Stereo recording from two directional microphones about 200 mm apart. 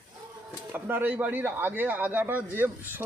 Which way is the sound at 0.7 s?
10° right (ahead or behind).